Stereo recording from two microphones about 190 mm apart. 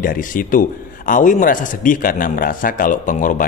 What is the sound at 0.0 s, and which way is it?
A man's voice, 45° left (ahead or behind).